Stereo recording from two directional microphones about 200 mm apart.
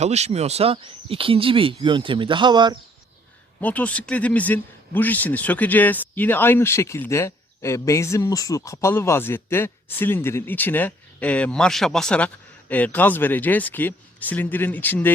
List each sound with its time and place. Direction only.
0.0 s speech: 35° right (ahead or behind)
3.6 s a man's voice: 5° left (ahead or behind)